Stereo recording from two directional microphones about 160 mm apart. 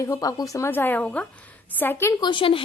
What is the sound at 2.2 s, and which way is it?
Speech, 30° left (ahead or behind).